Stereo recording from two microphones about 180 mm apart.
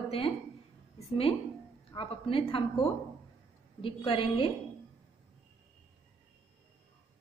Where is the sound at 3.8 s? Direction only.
30° left (ahead or behind).